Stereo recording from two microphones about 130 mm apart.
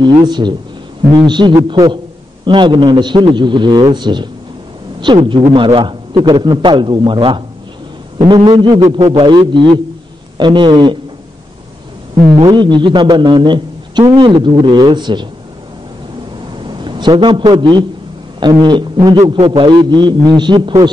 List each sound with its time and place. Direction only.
0.0 s a man's voice: 35° right (ahead or behind)
12.4 s a man's voice: 35° right (ahead or behind)
16.6 s a man's voice: 40° right (ahead or behind)
19.2 s a man's voice: 45° right (ahead or behind)